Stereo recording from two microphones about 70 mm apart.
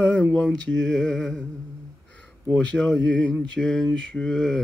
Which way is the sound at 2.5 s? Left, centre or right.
Centre.